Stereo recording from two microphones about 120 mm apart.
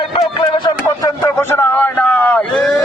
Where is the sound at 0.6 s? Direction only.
25° left (ahead or behind).